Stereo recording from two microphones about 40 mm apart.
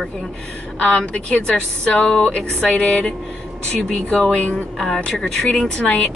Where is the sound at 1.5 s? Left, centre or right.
Left.